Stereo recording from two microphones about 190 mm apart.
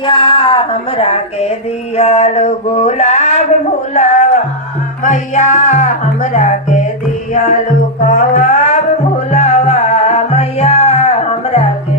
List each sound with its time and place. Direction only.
0.0 s speech: 25° left (ahead or behind)
2.0 s a sound: 35° left (ahead or behind)
3.9 s music: 40° left (ahead or behind)